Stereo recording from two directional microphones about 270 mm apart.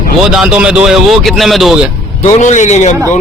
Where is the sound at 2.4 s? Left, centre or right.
Left.